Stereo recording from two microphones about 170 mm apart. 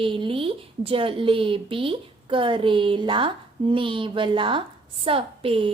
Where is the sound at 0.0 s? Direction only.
30° right (ahead or behind).